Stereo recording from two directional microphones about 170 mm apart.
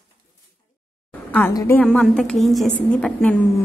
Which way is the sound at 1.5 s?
15° left (ahead or behind).